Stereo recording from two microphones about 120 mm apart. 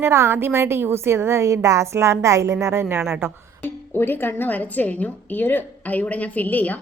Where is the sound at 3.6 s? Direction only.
15° left (ahead or behind).